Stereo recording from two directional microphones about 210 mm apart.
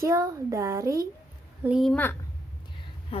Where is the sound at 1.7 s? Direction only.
Centre (ahead or behind).